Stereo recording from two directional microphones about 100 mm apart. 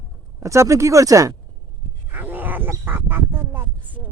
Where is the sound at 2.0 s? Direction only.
20° right (ahead or behind).